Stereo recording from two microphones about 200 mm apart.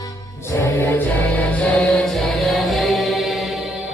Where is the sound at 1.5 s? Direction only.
5° left (ahead or behind).